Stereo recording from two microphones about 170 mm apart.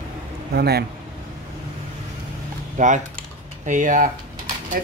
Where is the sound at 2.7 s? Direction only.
45° right (ahead or behind).